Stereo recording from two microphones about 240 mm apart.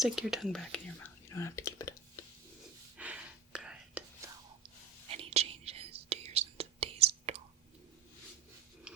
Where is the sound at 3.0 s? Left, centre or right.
Centre.